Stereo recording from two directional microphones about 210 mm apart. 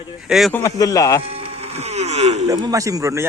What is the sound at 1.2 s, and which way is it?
Music, 30° right (ahead or behind).